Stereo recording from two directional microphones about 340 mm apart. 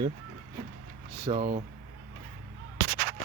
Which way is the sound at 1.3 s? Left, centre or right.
Centre.